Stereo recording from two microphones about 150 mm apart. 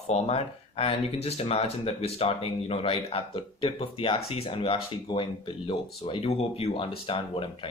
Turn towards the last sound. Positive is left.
turn(degrees=35)  # may be behind; listen again after turning